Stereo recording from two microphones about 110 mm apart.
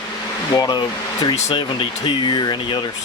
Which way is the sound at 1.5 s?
45° left (ahead or behind).